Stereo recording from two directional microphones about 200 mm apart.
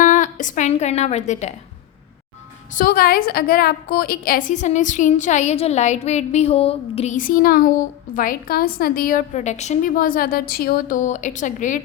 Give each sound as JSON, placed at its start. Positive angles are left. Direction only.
{"t": 0.0, "sound": "a woman's voice", "side_deg": 40}
{"t": 2.7, "sound": "a woman's voice", "side_deg": 45}